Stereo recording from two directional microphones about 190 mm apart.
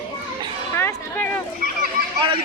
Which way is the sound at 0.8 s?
10° left (ahead or behind).